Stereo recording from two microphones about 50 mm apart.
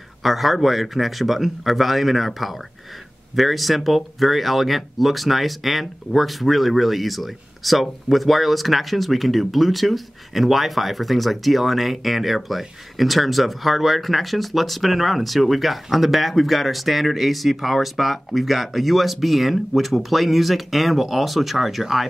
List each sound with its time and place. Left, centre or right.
0.2 s speech: centre